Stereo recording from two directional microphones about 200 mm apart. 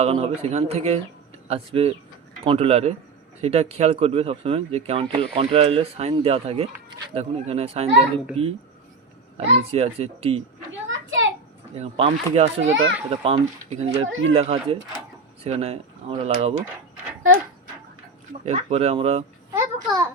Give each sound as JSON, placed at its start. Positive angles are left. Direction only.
{"t": 0.0, "sound": "speech", "side_deg": -30}
{"t": 10.7, "sound": "a sound", "side_deg": -70}
{"t": 11.8, "sound": "speech", "side_deg": -30}
{"t": 14.0, "sound": "speech", "side_deg": -80}
{"t": 14.3, "sound": "speech", "side_deg": -30}
{"t": 18.4, "sound": "speech", "side_deg": -30}
{"t": 19.5, "sound": "a sound", "side_deg": -15}